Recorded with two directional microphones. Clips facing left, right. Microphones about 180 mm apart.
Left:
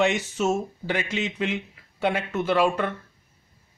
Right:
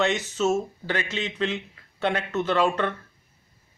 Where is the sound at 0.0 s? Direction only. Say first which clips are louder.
Left 1 dB; 10° left (ahead or behind).